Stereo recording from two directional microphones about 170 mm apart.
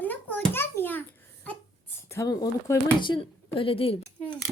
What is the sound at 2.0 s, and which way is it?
Speech, 20° left (ahead or behind).